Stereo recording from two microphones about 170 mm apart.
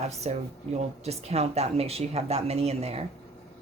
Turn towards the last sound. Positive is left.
turn(degrees=-35)  # may be behind; listen again after turning